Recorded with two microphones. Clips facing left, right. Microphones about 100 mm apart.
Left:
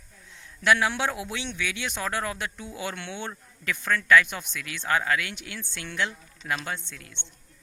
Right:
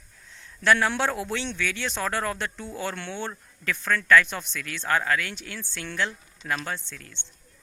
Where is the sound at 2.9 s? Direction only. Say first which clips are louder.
Right 2 dB; 45° right (ahead or behind).